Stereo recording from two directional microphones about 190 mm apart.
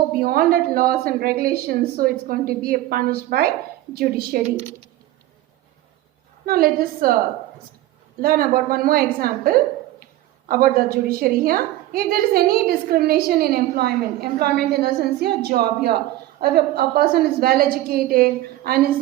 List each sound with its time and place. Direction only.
0.1 s a woman's voice: 50° right (ahead or behind)
6.4 s a woman's voice: 50° right (ahead or behind)
8.2 s a woman's voice: 50° right (ahead or behind)